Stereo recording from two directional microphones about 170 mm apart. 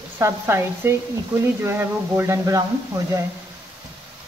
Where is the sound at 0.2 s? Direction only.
15° right (ahead or behind).